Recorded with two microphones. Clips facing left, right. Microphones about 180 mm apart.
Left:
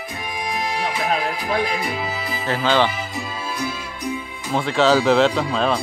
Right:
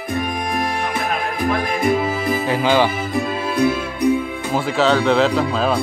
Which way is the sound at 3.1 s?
60° right (ahead or behind).